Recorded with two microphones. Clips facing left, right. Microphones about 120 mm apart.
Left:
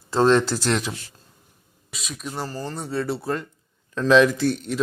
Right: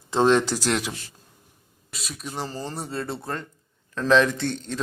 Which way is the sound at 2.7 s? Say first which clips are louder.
Left 8 dB; centre (ahead or behind).